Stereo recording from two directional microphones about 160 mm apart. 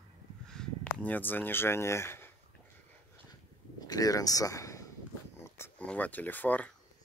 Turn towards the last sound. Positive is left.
turn(degrees=10)  # may be behind; listen again after turning